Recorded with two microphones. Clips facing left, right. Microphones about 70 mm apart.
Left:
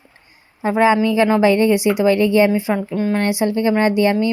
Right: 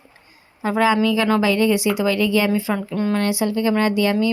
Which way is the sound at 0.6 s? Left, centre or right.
Left.